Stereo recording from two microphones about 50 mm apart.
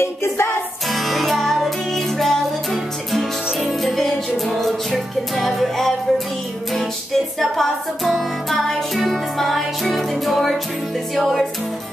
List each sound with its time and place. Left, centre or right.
0.0 s music: left
0.9 s music: centre
7.3 s music: centre